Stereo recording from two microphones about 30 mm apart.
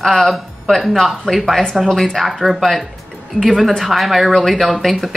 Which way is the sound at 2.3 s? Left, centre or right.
Centre.